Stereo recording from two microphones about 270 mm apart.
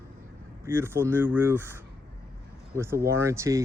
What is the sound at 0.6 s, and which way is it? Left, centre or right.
Speech, centre.